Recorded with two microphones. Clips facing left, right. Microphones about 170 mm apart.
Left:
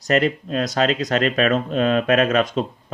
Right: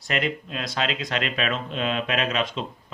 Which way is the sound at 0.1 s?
45° left (ahead or behind).